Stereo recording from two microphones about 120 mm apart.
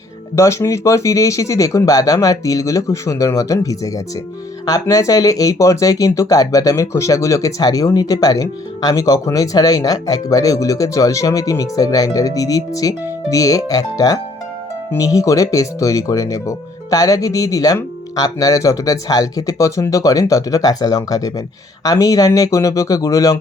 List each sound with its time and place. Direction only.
0.3 s speech: 25° left (ahead or behind)